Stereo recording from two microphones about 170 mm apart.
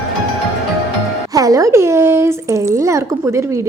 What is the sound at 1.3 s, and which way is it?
Speech, 20° right (ahead or behind).